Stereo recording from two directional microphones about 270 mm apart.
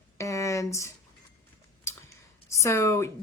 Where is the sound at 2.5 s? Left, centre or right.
Centre.